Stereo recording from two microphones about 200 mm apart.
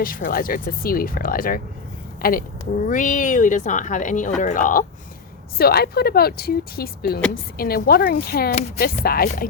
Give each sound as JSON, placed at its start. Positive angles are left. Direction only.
{"t": 0.0, "sound": "speech", "side_deg": 45}
{"t": 2.8, "sound": "speech", "side_deg": 40}